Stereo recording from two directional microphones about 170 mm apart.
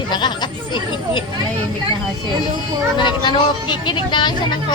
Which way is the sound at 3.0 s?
25° left (ahead or behind).